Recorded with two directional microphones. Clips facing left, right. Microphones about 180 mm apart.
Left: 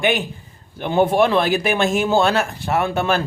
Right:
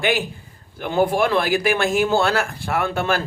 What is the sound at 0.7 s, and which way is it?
A man's voice, 25° left (ahead or behind).